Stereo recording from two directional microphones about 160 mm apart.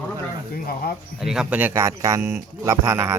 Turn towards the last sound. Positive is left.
turn(degrees=-20)  # may be behind; listen again after turning